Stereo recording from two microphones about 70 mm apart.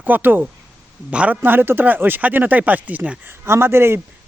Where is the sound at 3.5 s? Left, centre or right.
Right.